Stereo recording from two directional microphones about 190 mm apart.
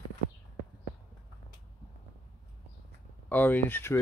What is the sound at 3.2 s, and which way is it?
Speech, 10° left (ahead or behind).